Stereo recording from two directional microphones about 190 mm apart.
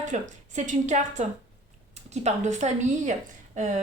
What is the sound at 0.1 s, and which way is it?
A woman's voice, 40° right (ahead or behind).